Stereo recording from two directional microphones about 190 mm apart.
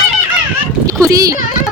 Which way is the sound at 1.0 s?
15° right (ahead or behind).